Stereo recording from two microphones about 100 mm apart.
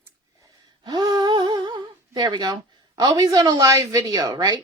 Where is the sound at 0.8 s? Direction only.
40° right (ahead or behind).